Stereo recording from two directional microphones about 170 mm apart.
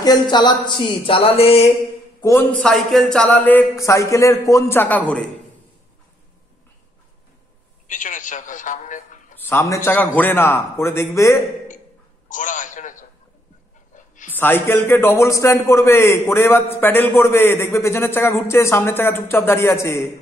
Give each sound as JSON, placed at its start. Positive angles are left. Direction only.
{"t": 0.0, "sound": "speech", "side_deg": 25}
{"t": 2.6, "sound": "a man's voice", "side_deg": 0}
{"t": 7.9, "sound": "speech", "side_deg": 50}
{"t": 9.4, "sound": "a man's voice", "side_deg": 15}
{"t": 12.3, "sound": "a man's voice", "side_deg": 50}
{"t": 13.9, "sound": "dog", "side_deg": 50}
{"t": 14.3, "sound": "a man's voice", "side_deg": 10}